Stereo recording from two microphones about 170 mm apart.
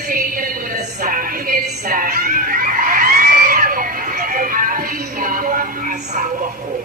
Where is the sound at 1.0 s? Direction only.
55° right (ahead or behind).